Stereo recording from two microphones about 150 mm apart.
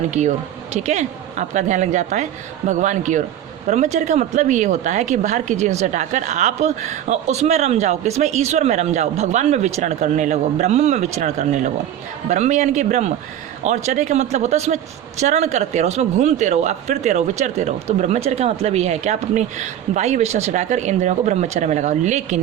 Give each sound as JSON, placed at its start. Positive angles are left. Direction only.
{"t": 0.1, "sound": "a man's voice", "side_deg": -50}
{"t": 11.2, "sound": "a man's voice", "side_deg": -60}